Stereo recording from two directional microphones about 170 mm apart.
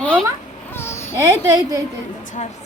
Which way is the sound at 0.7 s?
15° left (ahead or behind).